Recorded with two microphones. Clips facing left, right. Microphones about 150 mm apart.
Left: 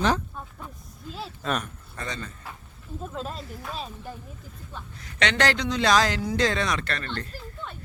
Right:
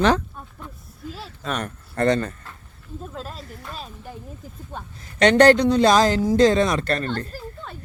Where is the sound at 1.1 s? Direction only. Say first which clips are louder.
Left 1 dB; centre (ahead or behind).